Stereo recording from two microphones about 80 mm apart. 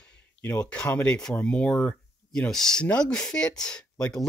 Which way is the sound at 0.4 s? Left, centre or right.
Centre.